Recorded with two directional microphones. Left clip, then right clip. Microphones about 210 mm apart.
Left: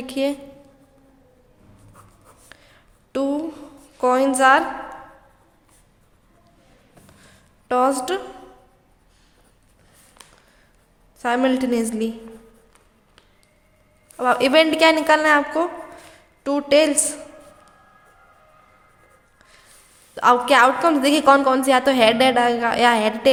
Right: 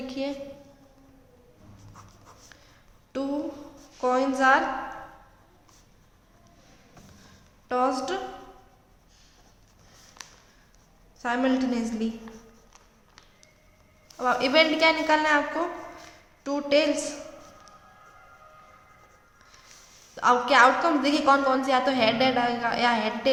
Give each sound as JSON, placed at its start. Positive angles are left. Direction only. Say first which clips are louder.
{"t": 0.1, "sound": "a woman's voice", "louder": "left 10 dB", "side_deg": 50}
{"t": 2.5, "sound": "a sound", "louder": "left 5 dB", "side_deg": 45}
{"t": 4.0, "sound": "a woman's voice", "louder": "left 6 dB", "side_deg": 50}
{"t": 7.7, "sound": "a woman's voice", "louder": "left 6 dB", "side_deg": 45}
{"t": 11.2, "sound": "a woman's voice", "louder": "left 6 dB", "side_deg": 45}
{"t": 14.2, "sound": "a woman's voice", "louder": "left 6 dB", "side_deg": 45}
{"t": 20.1, "sound": "a woman's voice", "louder": "left 5 dB", "side_deg": 45}